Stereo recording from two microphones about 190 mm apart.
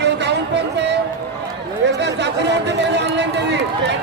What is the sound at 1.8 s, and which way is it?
Chatter, 65° right (ahead or behind).